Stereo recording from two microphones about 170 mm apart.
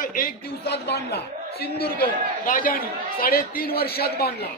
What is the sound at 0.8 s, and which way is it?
A man's voice, 70° left (ahead or behind).